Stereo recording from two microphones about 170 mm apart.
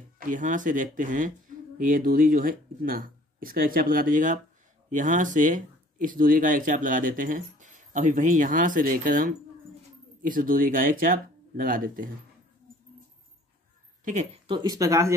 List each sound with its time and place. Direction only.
0.2 s speech: 50° right (ahead or behind)
14.0 s a woman's voice: 45° right (ahead or behind)
14.5 s speech: 25° right (ahead or behind)